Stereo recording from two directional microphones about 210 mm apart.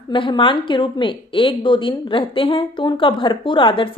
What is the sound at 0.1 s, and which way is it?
A woman's voice, 25° left (ahead or behind).